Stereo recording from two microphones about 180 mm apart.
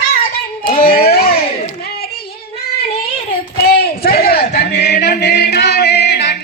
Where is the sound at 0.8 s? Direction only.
55° left (ahead or behind).